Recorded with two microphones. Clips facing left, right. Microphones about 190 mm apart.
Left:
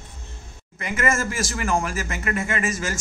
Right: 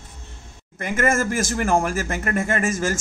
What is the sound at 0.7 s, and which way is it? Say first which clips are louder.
A man's voice: right 3 dB; 50° right (ahead or behind).